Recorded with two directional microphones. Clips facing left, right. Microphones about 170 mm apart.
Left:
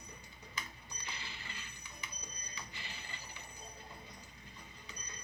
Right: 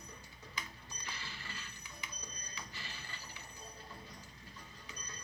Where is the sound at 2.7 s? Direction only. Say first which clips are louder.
Even; 20° left (ahead or behind).